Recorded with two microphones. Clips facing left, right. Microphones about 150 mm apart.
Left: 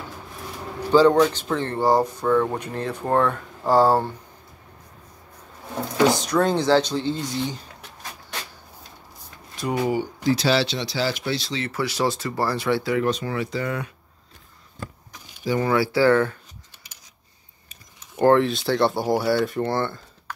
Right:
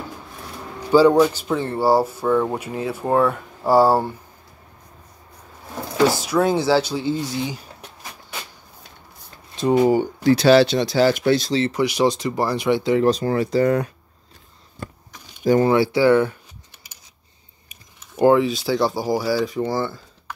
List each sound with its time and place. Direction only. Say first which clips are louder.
0.9 s speech: right 2 dB; 10° right (ahead or behind)
6.0 s speech: right 2 dB; 5° right (ahead or behind)
9.6 s speech: right 8 dB; 25° right (ahead or behind)
10.2 s speech: right 8 dB; 60° right (ahead or behind)
11.6 s speech: right 5 dB; 15° right (ahead or behind); by 13.9 s 40° right (ahead or behind)
15.6 s speech: left 1 dB; 25° right (ahead or behind)
17.6 s typing: right 1 dB; 10° right (ahead or behind)
18.7 s speech: left 2 dB; 5° right (ahead or behind)